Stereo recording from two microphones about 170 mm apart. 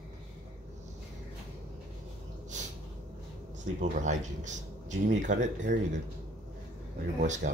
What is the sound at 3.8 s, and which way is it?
Speech, 45° right (ahead or behind).